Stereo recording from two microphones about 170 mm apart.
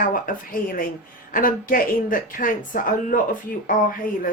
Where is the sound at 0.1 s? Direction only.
55° left (ahead or behind).